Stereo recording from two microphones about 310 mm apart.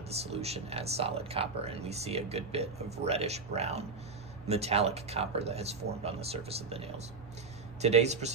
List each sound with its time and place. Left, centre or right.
0.3 s speech: centre